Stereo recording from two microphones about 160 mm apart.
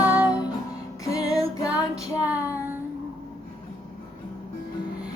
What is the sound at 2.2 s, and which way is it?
Child singing, 10° right (ahead or behind).